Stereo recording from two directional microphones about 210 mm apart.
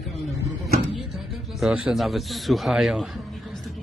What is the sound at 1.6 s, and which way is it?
A man's voice, 5° right (ahead or behind).